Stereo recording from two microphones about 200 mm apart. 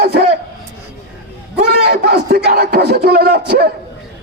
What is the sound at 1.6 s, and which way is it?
A man's voice, 50° right (ahead or behind).